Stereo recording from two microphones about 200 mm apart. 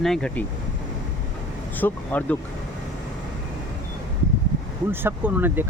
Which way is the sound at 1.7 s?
10° left (ahead or behind).